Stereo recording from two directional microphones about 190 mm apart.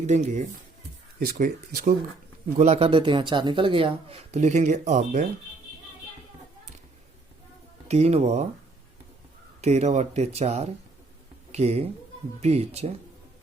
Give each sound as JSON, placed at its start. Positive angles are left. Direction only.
{"t": 0.1, "sound": "speech", "side_deg": -40}
{"t": 2.6, "sound": "speech", "side_deg": -35}
{"t": 7.9, "sound": "speech", "side_deg": -35}
{"t": 9.6, "sound": "speech", "side_deg": -35}